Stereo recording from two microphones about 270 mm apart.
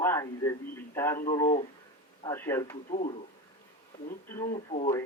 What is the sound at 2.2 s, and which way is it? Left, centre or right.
Speech, centre.